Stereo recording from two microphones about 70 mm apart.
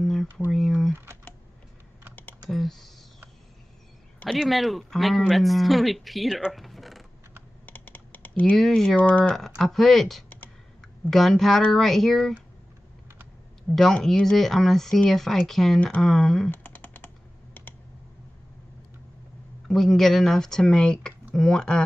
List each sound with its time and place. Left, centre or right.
0.0 s a sound: centre
0.5 s speech: centre
2.5 s speech: centre
4.3 s speech: centre
6.5 s mechanisms: centre
7.6 s computer keyboard: left
8.5 s speech: centre
8.8 s speech: left
9.3 s speech: centre
13.7 s speech: centre
16.4 s typing: left
19.7 s speech: centre